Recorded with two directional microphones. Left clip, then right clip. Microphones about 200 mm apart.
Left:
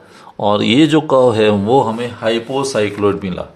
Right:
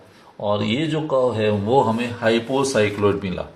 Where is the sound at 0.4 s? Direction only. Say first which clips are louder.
Left 9 dB; 55° left (ahead or behind).